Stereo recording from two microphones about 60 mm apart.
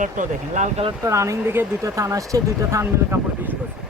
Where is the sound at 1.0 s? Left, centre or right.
Right.